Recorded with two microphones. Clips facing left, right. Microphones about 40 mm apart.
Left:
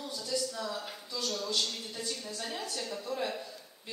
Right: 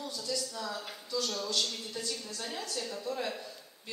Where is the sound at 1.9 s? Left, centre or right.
Left.